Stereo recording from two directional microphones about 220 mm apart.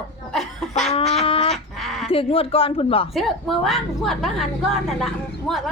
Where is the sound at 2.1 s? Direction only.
25° left (ahead or behind).